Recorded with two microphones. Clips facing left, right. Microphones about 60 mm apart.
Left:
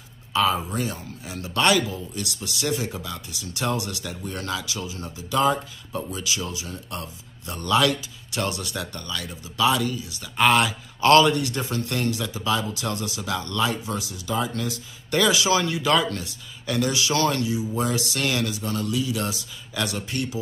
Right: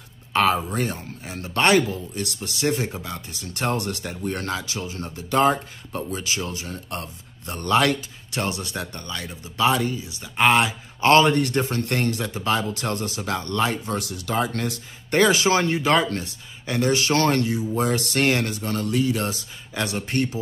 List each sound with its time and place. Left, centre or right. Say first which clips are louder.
0.3 s speech: right 2 dB; right
8.4 s speech: right 1 dB; right
11.3 s speech: right 4 dB; right
15.0 s speech: right 2 dB; right